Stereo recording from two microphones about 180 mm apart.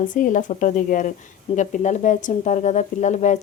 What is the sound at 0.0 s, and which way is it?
A woman's voice, 45° left (ahead or behind).